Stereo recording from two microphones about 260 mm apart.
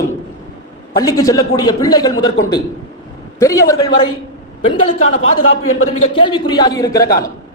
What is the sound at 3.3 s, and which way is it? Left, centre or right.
Speech, centre.